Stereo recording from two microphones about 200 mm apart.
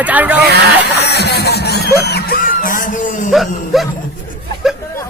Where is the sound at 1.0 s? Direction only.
55° left (ahead or behind); by 3.3 s 40° left (ahead or behind).